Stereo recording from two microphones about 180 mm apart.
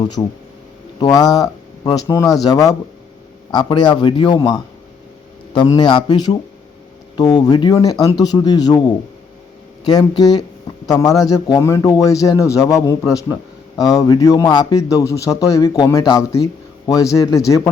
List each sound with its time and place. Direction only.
0.0 s a man's voice: 25° left (ahead or behind)